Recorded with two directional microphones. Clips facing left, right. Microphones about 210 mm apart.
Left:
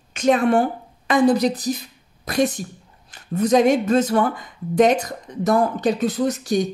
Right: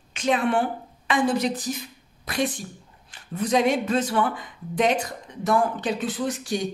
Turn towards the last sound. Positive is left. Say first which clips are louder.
# left 6 dB
turn(degrees=40)  # may be behind; listen again after turning